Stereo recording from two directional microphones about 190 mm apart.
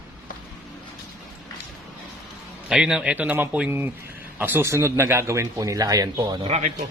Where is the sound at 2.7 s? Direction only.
5° right (ahead or behind); by 6.5 s 25° right (ahead or behind).